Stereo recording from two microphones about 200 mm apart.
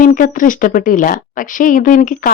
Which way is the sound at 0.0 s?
40° left (ahead or behind).